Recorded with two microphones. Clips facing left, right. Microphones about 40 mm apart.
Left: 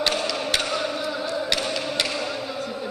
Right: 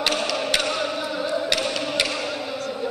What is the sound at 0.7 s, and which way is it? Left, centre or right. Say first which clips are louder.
Music: right 1 dB; centre.